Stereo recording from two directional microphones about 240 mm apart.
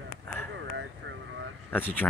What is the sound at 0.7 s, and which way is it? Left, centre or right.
Vehicle, right.